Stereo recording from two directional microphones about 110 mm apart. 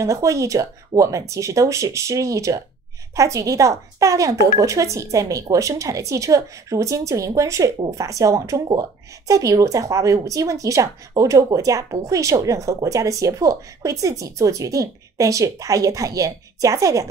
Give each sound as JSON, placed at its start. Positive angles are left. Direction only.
{"t": 0.0, "sound": "speech", "side_deg": -30}